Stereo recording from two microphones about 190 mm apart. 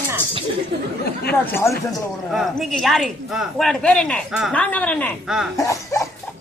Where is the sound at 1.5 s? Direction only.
15° left (ahead or behind).